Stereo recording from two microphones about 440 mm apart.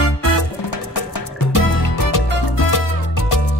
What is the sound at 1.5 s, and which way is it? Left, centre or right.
Music, left.